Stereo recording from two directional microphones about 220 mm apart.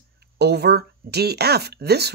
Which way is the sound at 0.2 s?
50° right (ahead or behind).